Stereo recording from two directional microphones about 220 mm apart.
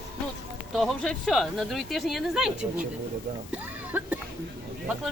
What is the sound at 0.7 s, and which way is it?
Speech, centre (ahead or behind).